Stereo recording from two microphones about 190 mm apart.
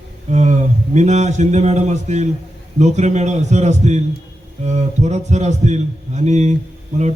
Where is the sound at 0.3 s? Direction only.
35° right (ahead or behind).